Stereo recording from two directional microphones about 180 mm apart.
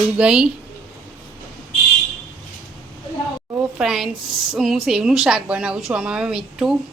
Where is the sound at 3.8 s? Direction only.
Centre (ahead or behind).